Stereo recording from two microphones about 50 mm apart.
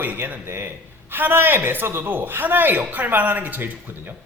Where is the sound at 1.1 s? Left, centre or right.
Right.